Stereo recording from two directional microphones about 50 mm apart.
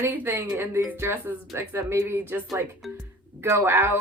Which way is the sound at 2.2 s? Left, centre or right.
Right.